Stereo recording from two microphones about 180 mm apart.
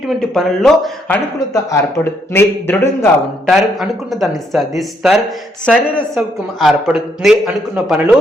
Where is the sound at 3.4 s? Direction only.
Centre (ahead or behind).